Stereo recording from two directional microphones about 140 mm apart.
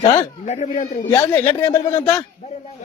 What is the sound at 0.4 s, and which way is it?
Speech, 55° left (ahead or behind).